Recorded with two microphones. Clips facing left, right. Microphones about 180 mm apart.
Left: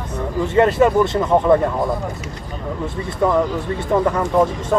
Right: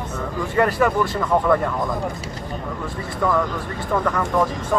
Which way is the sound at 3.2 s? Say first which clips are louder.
Left 4 dB; 20° left (ahead or behind).